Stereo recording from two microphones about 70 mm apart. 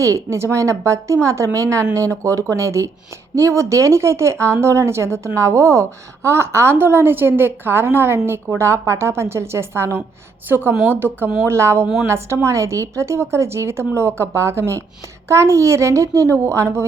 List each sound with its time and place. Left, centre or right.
0.0 s a woman's voice: right